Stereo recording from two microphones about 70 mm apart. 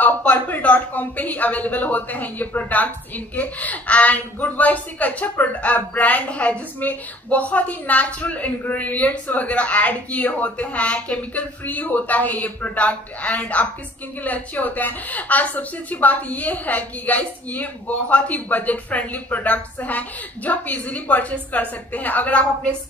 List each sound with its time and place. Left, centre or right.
0.2 s a woman's voice: left